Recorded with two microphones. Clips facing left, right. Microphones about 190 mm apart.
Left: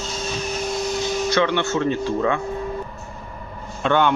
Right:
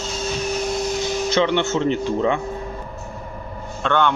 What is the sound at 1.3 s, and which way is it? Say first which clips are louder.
Speech: right 2 dB; 20° right (ahead or behind).